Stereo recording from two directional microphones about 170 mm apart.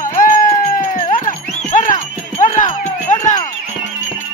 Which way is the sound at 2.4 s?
50° left (ahead or behind).